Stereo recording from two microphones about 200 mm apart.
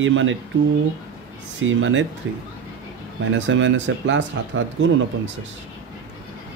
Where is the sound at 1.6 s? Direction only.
70° right (ahead or behind).